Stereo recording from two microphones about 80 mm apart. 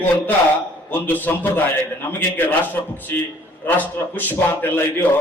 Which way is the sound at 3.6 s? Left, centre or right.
Left.